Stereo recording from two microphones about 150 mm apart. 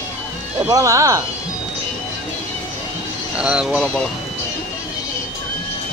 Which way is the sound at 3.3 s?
5° right (ahead or behind).